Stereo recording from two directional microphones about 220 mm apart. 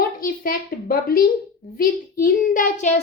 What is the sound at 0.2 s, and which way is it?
A woman's voice, 40° left (ahead or behind).